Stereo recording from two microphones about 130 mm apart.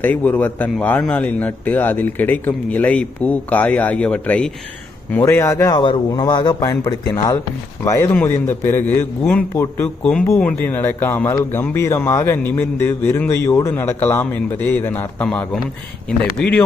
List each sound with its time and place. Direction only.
0.0 s speech: 10° left (ahead or behind)
5.2 s speech: 20° left (ahead or behind)
5.7 s a man's voice: 35° left (ahead or behind); by 15.3 s 15° left (ahead or behind)
16.4 s speech: 10° left (ahead or behind)